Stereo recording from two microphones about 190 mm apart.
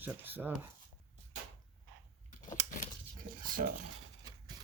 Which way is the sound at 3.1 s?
45° right (ahead or behind).